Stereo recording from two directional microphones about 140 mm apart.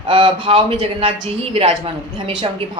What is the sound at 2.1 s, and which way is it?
Speech, 35° right (ahead or behind).